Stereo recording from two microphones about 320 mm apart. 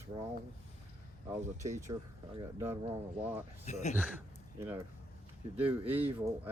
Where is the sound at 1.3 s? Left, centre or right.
Centre.